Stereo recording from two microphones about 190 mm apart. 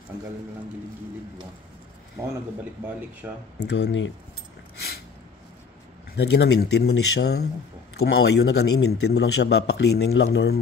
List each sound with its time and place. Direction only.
2.2 s speech: 15° right (ahead or behind)
3.5 s a man's voice: 60° left (ahead or behind)
6.1 s a man's voice: 60° left (ahead or behind)